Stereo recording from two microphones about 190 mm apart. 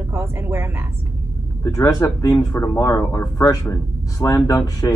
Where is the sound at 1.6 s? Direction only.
15° left (ahead or behind).